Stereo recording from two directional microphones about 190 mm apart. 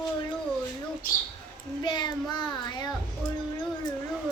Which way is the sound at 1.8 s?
25° left (ahead or behind).